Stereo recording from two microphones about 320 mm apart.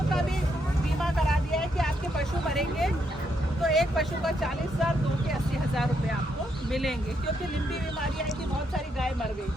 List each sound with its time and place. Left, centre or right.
1.5 s vehicle: centre
3.6 s speech: centre